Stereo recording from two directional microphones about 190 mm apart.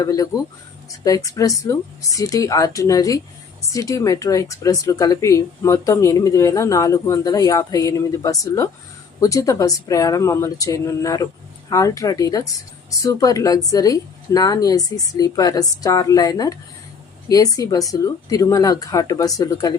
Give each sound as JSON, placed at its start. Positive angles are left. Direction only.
{"t": 0.0, "sound": "a woman's voice", "side_deg": 20}